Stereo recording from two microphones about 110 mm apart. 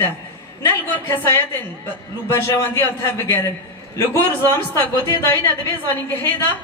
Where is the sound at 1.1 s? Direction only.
20° left (ahead or behind).